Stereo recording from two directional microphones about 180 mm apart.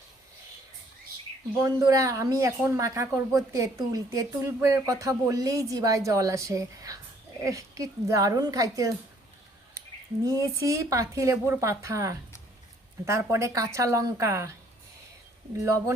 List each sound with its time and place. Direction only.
1.5 s speech: 20° right (ahead or behind)
10.2 s speech: 15° right (ahead or behind)
15.6 s speech: 15° right (ahead or behind)